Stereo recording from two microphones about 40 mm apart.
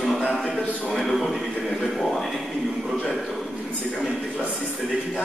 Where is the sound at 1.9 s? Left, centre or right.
Centre.